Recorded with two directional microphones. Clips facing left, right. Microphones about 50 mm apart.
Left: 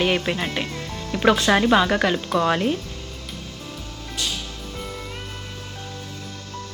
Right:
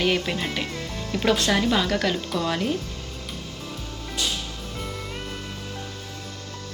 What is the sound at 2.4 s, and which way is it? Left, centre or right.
Speech, left.